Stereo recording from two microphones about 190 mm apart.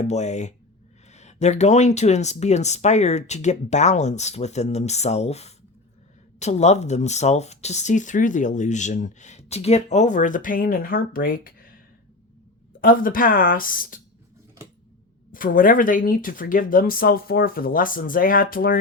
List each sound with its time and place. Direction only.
0.0 s speech: 35° left (ahead or behind)
12.8 s speech: 45° left (ahead or behind)
15.3 s speech: 45° left (ahead or behind)